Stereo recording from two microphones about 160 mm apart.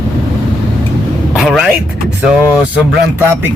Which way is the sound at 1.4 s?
5° right (ahead or behind).